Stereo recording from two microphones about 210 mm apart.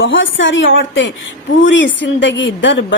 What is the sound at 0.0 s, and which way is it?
A woman's voice, 65° left (ahead or behind).